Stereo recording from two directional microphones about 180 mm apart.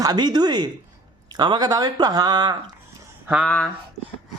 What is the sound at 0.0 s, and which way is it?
Speech, 20° right (ahead or behind).